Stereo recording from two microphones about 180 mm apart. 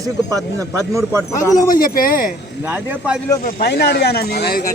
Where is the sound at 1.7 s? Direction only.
50° left (ahead or behind).